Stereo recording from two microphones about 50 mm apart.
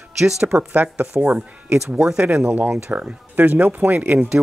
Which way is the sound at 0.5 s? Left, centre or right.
Right.